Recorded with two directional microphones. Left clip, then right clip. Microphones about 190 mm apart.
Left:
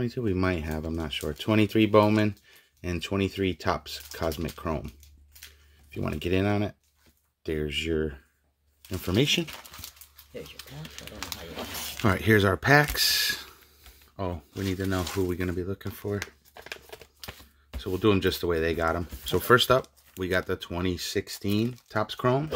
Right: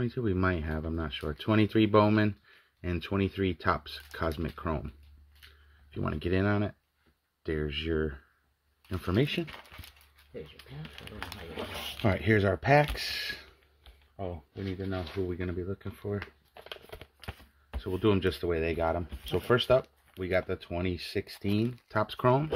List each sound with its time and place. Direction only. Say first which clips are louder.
0.0 s speech: left 2 dB; 5° right (ahead or behind)
12.0 s speech: left 5 dB; 15° left (ahead or behind)
14.1 s speech: left 5 dB; 35° left (ahead or behind)
15.2 s speech: left 5 dB; 15° left (ahead or behind); by 22.5 s 15° right (ahead or behind)